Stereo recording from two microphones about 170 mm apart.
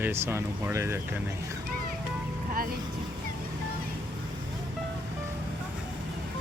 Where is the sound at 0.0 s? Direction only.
15° right (ahead or behind).